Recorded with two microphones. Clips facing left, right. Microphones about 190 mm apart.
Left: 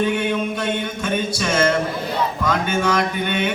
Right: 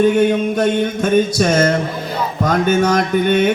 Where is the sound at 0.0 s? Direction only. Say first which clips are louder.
Right 7 dB; 45° right (ahead or behind).